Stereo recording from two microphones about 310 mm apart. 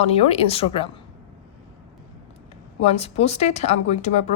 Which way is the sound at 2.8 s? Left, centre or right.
Centre.